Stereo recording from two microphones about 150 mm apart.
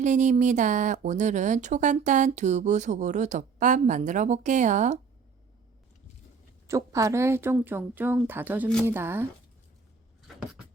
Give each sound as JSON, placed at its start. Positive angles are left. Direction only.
{"t": 0.0, "sound": "speech", "side_deg": -55}
{"t": 6.7, "sound": "speech", "side_deg": -20}